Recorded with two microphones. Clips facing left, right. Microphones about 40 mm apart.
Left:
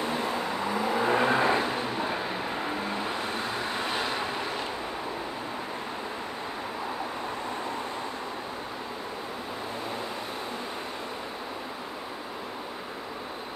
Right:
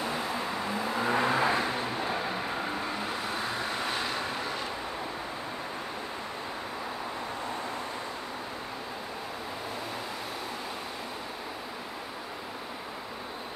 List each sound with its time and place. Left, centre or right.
0.7 s vehicle: left